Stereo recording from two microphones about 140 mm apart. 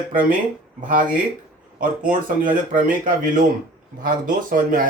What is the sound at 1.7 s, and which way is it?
Speech, 75° right (ahead or behind).